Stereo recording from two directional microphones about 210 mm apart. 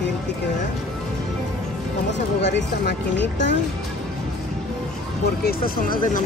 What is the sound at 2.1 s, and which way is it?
Speech, 55° left (ahead or behind).